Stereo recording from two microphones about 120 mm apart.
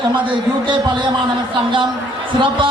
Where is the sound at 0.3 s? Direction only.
40° right (ahead or behind).